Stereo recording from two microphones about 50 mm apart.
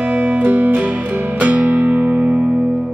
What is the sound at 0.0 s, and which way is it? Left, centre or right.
Music, right.